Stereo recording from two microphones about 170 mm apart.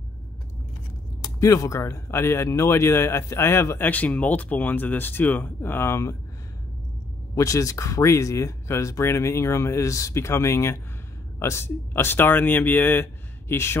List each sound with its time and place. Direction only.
1.2 s speech: 20° left (ahead or behind)
7.3 s speech: 20° left (ahead or behind)